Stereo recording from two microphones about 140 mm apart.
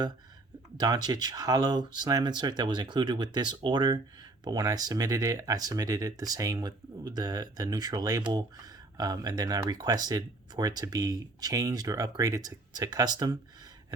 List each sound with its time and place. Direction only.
0.8 s speech: 30° right (ahead or behind)